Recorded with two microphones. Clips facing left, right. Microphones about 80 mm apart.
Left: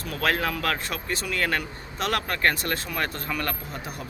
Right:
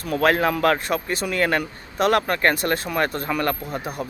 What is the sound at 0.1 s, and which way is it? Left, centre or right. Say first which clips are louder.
Speech: right 7 dB; right.